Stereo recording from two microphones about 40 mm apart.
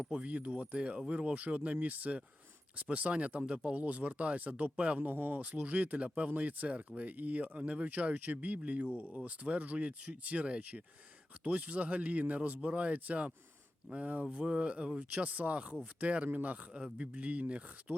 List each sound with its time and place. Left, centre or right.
0.2 s speech: right
3.8 s speech: right
5.5 s speech: right
11.4 s speech: right